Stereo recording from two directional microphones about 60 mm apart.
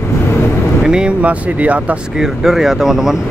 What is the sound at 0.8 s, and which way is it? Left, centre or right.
Speech, centre.